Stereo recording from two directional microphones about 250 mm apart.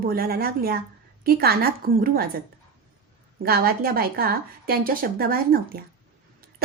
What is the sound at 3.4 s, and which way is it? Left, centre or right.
A woman's voice, right.